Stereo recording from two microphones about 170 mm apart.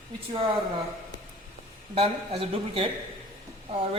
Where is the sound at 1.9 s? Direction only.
35° right (ahead or behind).